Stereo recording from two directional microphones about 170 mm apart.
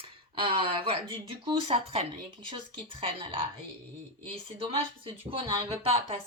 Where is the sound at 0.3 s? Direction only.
30° right (ahead or behind).